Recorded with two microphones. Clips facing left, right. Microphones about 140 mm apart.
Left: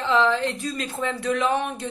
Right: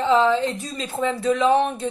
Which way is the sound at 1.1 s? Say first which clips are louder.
Right 5 dB; 25° right (ahead or behind).